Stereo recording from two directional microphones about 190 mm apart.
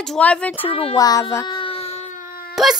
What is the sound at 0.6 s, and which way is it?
Speech, 30° left (ahead or behind).